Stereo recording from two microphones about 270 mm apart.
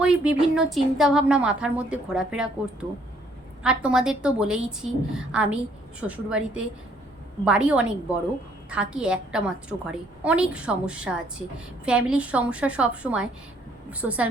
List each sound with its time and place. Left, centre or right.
0.0 s a woman's voice: centre
3.6 s a woman's voice: centre